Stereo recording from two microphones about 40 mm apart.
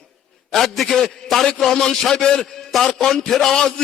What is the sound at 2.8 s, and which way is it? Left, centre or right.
Speech, centre.